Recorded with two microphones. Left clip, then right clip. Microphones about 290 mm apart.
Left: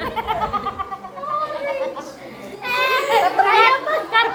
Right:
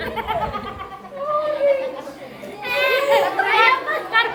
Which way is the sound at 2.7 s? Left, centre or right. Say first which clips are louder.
Right 1 dB; left.